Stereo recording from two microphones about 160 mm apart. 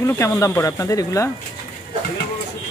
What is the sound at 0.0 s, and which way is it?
Speech, 20° left (ahead or behind).